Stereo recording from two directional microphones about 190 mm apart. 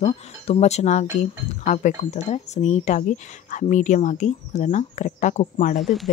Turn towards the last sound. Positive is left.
turn(degrees=0)  # may be behind; listen again after turning